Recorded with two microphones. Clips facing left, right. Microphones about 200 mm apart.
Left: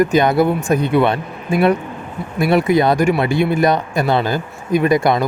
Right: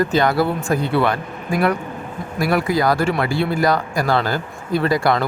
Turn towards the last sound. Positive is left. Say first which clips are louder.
# left 3 dB
turn(degrees=20)  # may be behind; listen again after turning